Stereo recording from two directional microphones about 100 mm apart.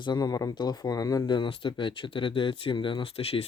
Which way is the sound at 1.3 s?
55° left (ahead or behind).